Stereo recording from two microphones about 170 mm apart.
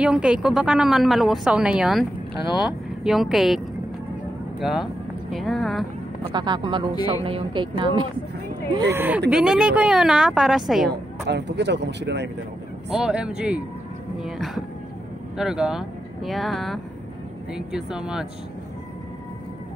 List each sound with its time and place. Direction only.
0.0 s a woman's voice: 5° right (ahead or behind)
6.3 s speech: 25° right (ahead or behind)
8.9 s a woman's voice: 10° right (ahead or behind)
11.2 s speech: 90° right
12.9 s a woman's voice: 5° right (ahead or behind)